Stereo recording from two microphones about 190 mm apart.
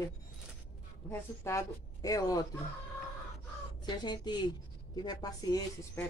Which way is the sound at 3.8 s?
20° left (ahead or behind).